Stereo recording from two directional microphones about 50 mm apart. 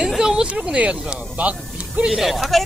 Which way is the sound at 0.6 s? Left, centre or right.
Right.